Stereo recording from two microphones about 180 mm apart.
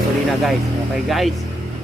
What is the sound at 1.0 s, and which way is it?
Speech, centre (ahead or behind).